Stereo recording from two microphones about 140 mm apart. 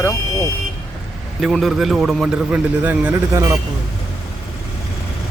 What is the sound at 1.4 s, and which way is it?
A man's voice, centre (ahead or behind).